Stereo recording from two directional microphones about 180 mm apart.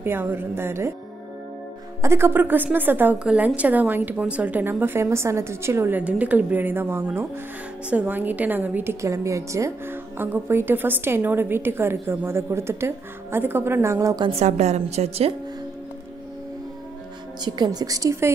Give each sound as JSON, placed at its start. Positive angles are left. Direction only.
{"t": 0.0, "sound": "a woman's voice", "side_deg": -10}
{"t": 2.0, "sound": "a woman's voice", "side_deg": -15}
{"t": 14.3, "sound": "a woman's voice", "side_deg": -35}
{"t": 17.5, "sound": "a woman's voice", "side_deg": -25}